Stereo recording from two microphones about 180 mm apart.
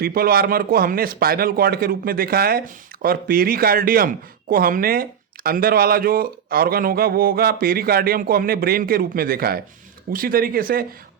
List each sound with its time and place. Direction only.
0.0 s a man's voice: 55° right (ahead or behind)